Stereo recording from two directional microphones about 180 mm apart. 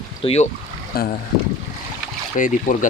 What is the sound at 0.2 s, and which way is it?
Speech, 35° left (ahead or behind).